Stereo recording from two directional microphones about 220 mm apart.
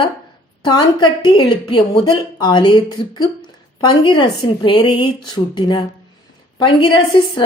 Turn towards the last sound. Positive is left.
turn(degrees=20)  # may be behind; listen again after turning